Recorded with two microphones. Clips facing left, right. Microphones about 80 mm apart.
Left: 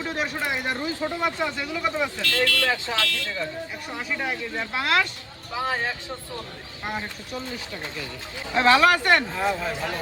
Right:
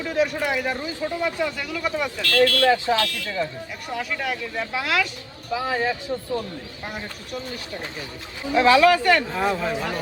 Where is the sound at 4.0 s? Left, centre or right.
Centre.